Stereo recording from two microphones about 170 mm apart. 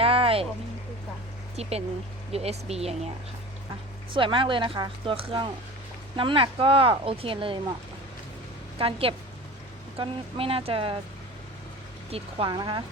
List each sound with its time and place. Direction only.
0.0 s a sound: 35° right (ahead or behind)
2.3 s speech: 35° right (ahead or behind)
4.1 s speech: 30° right (ahead or behind)
8.8 s speech: 35° right (ahead or behind)
12.1 s speech: 30° right (ahead or behind)